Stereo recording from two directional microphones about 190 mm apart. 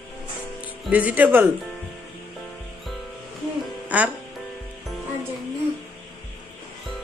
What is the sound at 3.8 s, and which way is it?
Music, 10° right (ahead or behind).